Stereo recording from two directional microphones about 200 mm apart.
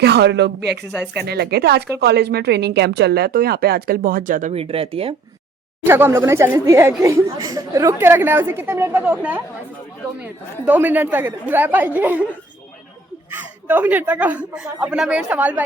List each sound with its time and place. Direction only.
0.0 s speech: 55° right (ahead or behind); by 5.1 s 30° right (ahead or behind)
5.8 s a woman's voice: 10° right (ahead or behind)
10.7 s a woman's voice: 10° right (ahead or behind)
13.3 s a woman's voice: 10° right (ahead or behind)